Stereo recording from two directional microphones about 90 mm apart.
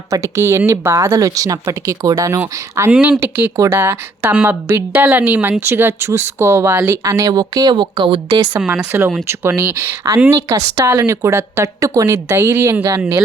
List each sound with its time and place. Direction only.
0.1 s a woman's voice: 35° right (ahead or behind)
2.9 s speech: 15° right (ahead or behind)
7.0 s a woman's voice: 40° right (ahead or behind); by 8.4 s 60° right (ahead or behind)
8.5 s speech: 10° right (ahead or behind)
8.9 s speech: 25° right (ahead or behind)
10.3 s a woman's voice: 35° right (ahead or behind)